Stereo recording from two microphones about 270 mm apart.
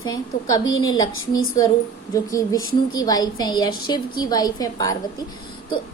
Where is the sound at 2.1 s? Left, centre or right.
Centre.